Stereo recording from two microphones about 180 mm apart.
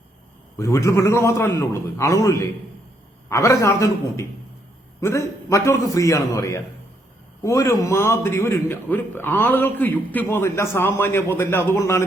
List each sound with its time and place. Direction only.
0.6 s a man's voice: 15° left (ahead or behind)